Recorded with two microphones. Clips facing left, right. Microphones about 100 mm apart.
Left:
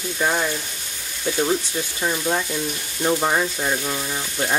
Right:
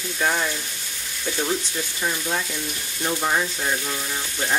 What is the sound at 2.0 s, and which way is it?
Speech, 20° left (ahead or behind).